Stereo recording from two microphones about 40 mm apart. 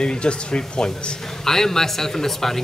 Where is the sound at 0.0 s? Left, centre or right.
Left.